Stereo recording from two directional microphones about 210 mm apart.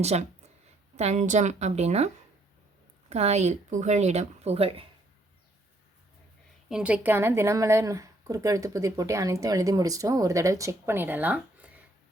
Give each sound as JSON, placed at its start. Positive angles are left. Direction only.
{"t": 0.0, "sound": "speech", "side_deg": -30}
{"t": 3.1, "sound": "speech", "side_deg": -30}
{"t": 6.7, "sound": "speech", "side_deg": -5}